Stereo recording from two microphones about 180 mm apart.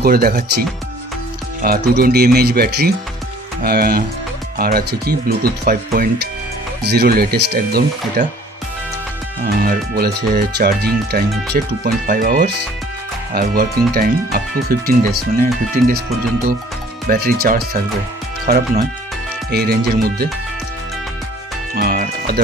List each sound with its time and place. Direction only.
0.0 s speech: 55° right (ahead or behind)
9.6 s speech: 55° right (ahead or behind)
17.1 s speech: 55° right (ahead or behind)
21.7 s music: 55° right (ahead or behind)